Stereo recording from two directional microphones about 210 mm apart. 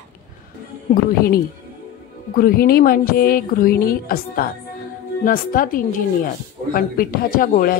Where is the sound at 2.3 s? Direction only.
45° left (ahead or behind).